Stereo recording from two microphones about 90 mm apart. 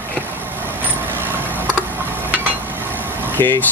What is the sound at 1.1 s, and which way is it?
Vehicle, 25° right (ahead or behind).